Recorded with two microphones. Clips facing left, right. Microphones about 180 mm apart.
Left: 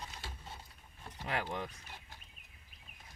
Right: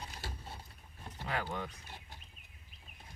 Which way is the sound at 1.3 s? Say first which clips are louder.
Even; 25° left (ahead or behind).